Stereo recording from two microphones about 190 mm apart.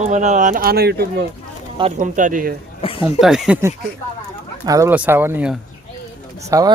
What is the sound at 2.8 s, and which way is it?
Speech, 30° left (ahead or behind).